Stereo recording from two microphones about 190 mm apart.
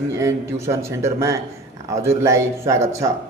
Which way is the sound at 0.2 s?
15° right (ahead or behind).